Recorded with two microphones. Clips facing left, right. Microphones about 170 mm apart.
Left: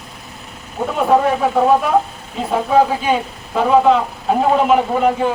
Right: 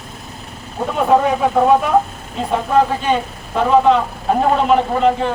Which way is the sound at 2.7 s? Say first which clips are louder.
Left 1 dB; 5° left (ahead or behind).